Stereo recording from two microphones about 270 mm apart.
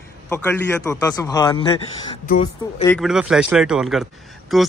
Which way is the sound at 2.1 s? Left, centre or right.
Left.